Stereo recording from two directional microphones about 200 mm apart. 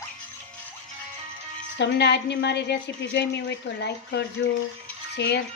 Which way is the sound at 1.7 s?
60° left (ahead or behind).